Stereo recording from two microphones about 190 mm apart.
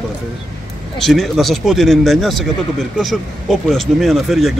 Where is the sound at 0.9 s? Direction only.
Centre (ahead or behind).